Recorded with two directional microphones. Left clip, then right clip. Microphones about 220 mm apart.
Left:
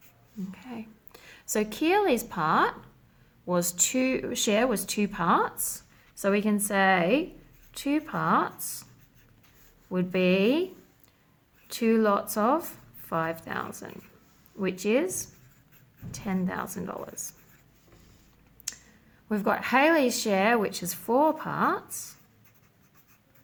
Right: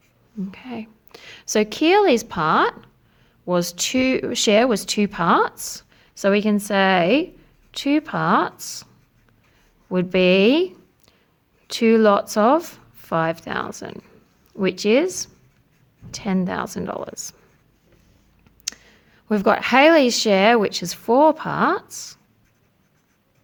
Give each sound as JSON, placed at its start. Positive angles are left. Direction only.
{"t": 0.5, "sound": "speech", "side_deg": -40}
{"t": 9.9, "sound": "speech", "side_deg": -40}
{"t": 11.7, "sound": "speech", "side_deg": -40}
{"t": 18.6, "sound": "speech", "side_deg": -45}